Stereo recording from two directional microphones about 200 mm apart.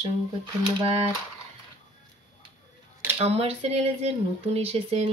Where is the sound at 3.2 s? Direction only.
30° right (ahead or behind).